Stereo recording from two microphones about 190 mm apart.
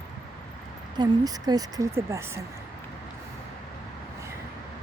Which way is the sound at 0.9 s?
20° right (ahead or behind).